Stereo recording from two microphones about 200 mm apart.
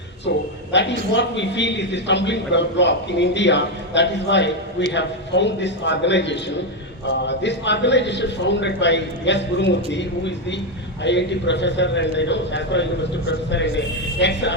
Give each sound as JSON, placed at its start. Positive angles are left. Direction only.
{"t": 0.7, "sound": "a man's voice", "side_deg": 60}